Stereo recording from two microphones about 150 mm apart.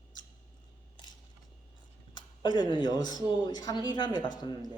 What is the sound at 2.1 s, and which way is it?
Speech, 30° left (ahead or behind).